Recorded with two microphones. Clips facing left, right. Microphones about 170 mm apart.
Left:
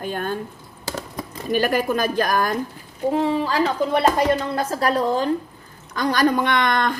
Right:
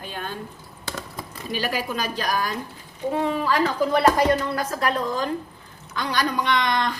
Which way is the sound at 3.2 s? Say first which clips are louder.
Right 1 dB; 30° left (ahead or behind).